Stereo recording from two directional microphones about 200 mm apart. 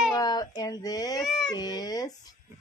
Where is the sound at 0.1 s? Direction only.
20° left (ahead or behind).